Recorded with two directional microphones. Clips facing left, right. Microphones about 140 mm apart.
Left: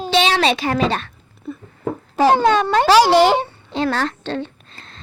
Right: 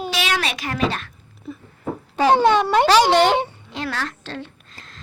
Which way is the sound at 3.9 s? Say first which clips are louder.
Left 7 dB; 30° left (ahead or behind).